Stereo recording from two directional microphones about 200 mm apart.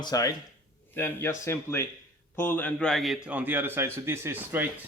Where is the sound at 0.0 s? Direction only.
20° left (ahead or behind); by 4.7 s 10° right (ahead or behind).